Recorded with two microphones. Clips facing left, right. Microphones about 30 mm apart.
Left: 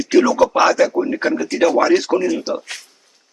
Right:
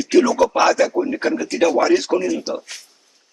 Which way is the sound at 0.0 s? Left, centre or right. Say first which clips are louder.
Left 1 dB; centre.